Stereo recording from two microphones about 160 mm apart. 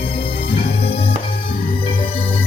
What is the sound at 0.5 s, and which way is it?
Music, 35° left (ahead or behind).